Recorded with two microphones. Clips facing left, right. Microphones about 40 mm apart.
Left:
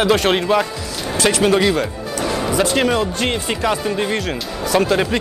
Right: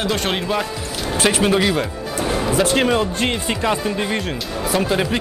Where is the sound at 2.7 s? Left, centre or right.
Right.